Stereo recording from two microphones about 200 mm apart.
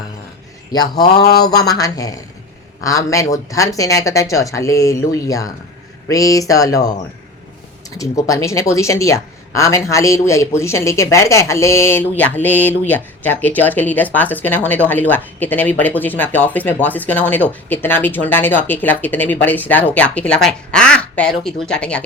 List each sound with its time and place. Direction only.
0.7 s speech: 20° left (ahead or behind)
1.2 s mantra: 50° left (ahead or behind)
1.5 s speech: 20° left (ahead or behind)
7.9 s speech: 15° left (ahead or behind)